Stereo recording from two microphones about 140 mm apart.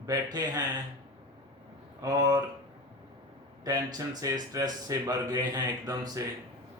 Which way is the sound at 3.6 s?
25° right (ahead or behind).